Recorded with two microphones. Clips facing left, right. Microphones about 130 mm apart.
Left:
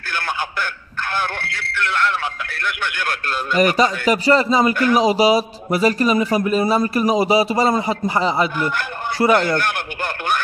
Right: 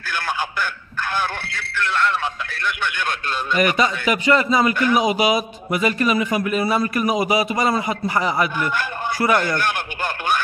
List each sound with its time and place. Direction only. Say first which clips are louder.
3.5 s a man's voice: left 3 dB; 35° left (ahead or behind)